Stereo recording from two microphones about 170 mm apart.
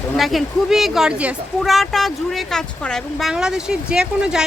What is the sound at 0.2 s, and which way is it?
Speech, centre (ahead or behind).